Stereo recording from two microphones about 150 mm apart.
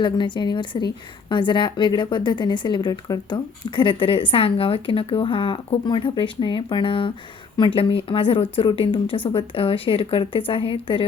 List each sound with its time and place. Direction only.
0.0 s a woman's voice: 30° left (ahead or behind)